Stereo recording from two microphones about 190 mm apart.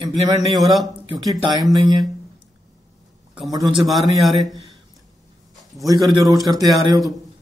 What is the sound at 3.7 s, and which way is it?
Speech, centre (ahead or behind).